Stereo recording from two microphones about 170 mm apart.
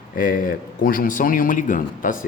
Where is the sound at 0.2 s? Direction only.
55° left (ahead or behind).